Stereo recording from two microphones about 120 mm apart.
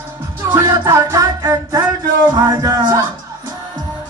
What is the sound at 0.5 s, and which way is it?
Music, 30° right (ahead or behind).